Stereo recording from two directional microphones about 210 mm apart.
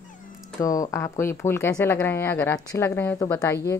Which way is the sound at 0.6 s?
15° left (ahead or behind).